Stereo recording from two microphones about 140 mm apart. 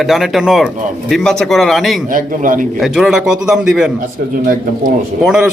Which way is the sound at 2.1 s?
75° right (ahead or behind).